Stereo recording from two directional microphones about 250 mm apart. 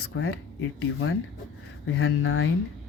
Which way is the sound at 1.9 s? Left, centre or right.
Left.